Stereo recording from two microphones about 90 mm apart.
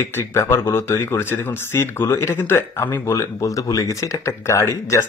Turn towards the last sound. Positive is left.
turn(degrees=35)  # may be behind; listen again after turning